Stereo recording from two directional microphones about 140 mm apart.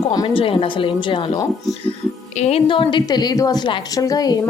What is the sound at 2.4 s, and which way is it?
A woman's voice, 45° left (ahead or behind).